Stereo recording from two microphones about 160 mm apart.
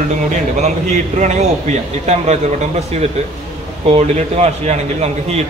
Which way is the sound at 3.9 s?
40° right (ahead or behind).